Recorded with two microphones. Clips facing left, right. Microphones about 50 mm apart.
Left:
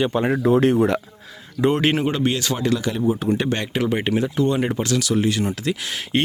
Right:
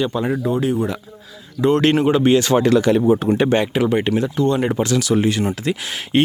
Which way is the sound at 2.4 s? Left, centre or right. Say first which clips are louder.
Right 7 dB; right.